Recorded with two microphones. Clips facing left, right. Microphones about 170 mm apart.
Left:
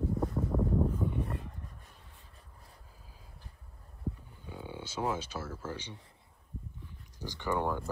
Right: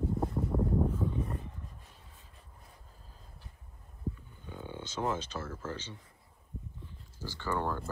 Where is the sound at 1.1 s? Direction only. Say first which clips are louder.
Even; 70° left (ahead or behind).